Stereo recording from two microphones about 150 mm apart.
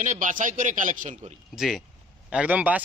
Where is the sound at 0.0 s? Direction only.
60° right (ahead or behind).